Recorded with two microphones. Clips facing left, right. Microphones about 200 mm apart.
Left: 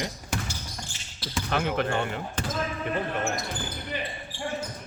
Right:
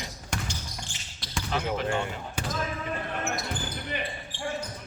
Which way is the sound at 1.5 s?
60° left (ahead or behind).